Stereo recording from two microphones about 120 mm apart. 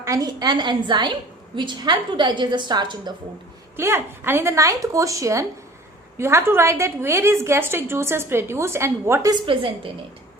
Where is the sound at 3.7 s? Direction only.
20° right (ahead or behind).